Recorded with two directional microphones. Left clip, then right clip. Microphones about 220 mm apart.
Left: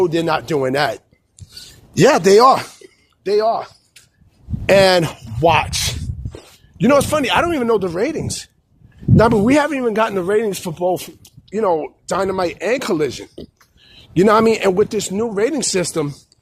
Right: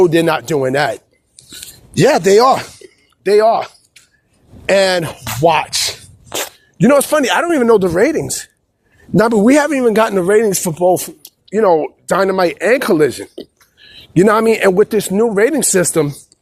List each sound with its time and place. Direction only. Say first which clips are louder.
0.0 s a man's voice: right 5 dB; 30° right (ahead or behind)
0.5 s speech: right 3 dB; 15° right (ahead or behind)
3.2 s speech: right 6 dB; 30° right (ahead or behind)
4.6 s a man's voice: left 1 dB; 25° right (ahead or behind)
5.0 s speech: right 2 dB; 10° right (ahead or behind)
6.7 s a man's voice: right 3 dB; 25° right (ahead or behind)